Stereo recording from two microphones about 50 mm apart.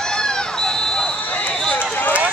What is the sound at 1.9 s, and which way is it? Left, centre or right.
Run, left.